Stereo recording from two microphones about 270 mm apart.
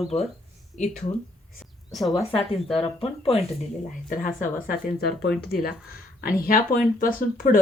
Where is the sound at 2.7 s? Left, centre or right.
Centre.